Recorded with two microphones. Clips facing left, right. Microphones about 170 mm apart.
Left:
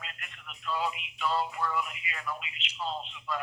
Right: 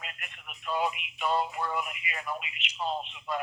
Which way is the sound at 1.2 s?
20° right (ahead or behind).